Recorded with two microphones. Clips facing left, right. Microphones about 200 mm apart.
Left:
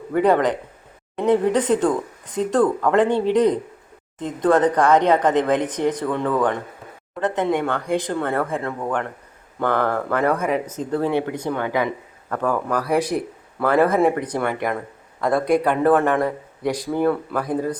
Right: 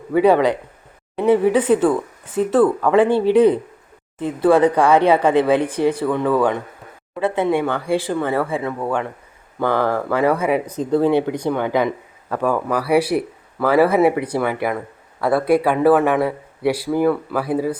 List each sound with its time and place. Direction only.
0.1 s speech: 10° right (ahead or behind)